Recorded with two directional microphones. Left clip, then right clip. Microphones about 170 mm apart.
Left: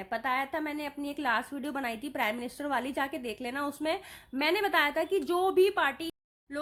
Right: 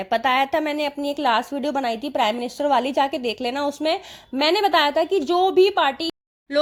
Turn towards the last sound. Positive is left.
turn(degrees=-20)  # may be behind; listen again after turning